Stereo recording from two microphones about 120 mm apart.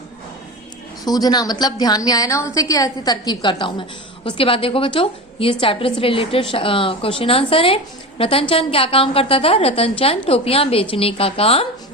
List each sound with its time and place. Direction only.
1.0 s a woman's voice: 35° left (ahead or behind); by 11.6 s 55° left (ahead or behind)